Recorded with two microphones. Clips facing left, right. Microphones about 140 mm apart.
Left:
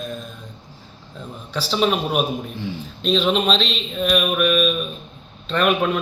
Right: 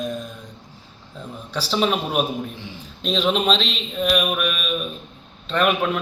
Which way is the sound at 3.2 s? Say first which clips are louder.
Right 3 dB; 5° right (ahead or behind).